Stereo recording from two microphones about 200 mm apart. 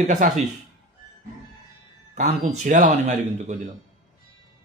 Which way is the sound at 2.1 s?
35° right (ahead or behind).